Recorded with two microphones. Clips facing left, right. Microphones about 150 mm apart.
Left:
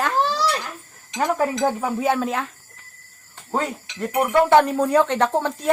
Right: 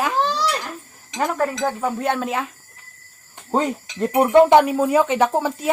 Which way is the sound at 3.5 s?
25° right (ahead or behind).